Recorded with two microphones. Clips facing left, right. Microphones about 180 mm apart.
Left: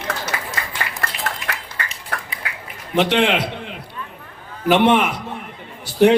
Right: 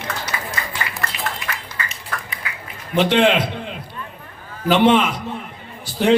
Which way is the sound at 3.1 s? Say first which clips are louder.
Right 5 dB; 70° left (ahead or behind).